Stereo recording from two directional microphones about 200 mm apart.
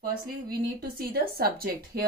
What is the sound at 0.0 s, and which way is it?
Speech, 50° right (ahead or behind).